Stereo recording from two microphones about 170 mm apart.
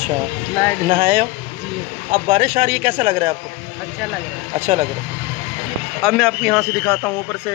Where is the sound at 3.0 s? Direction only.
35° right (ahead or behind).